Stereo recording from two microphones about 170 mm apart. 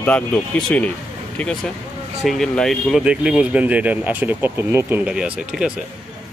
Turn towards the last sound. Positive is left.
turn(degrees=-5)  # may be behind; listen again after turning